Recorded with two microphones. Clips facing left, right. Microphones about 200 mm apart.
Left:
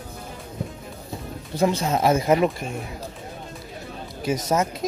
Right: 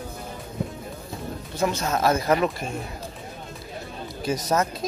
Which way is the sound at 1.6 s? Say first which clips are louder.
Left 2 dB; 25° left (ahead or behind).